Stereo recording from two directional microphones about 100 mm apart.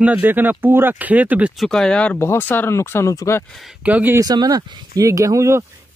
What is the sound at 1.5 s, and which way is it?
Speech, 5° left (ahead or behind).